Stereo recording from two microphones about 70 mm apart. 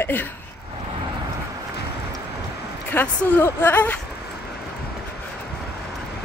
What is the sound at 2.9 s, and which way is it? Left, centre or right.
Speech, left.